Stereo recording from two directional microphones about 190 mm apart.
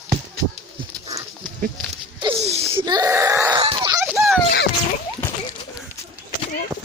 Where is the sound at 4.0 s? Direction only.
5° right (ahead or behind).